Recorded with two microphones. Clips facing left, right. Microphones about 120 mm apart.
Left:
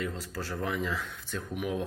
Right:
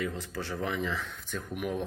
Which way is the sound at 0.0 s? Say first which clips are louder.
Right 1 dB; centre (ahead or behind).